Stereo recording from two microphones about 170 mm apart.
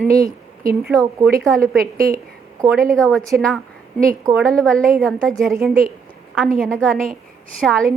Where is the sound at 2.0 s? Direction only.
20° right (ahead or behind).